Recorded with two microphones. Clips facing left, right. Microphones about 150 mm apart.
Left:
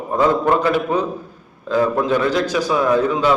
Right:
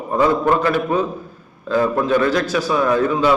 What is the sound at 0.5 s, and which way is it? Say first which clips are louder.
Speech: even; 15° left (ahead or behind).